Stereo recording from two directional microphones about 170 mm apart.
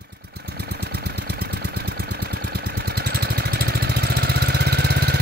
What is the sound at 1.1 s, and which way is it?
Engine, 70° right (ahead or behind).